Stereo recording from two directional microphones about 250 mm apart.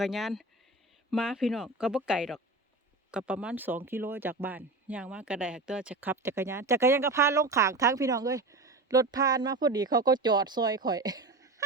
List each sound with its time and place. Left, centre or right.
0.0 s speech: centre